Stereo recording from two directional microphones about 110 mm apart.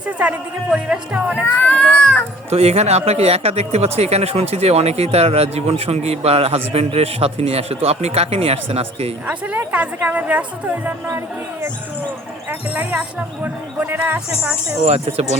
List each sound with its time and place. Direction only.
0.2 s speech: 10° right (ahead or behind)
1.5 s speech: 15° left (ahead or behind)
2.5 s speech: 70° right (ahead or behind)
9.2 s speech: 10° right (ahead or behind)
12.5 s speech: 10° right (ahead or behind)
14.8 s speech: 70° right (ahead or behind)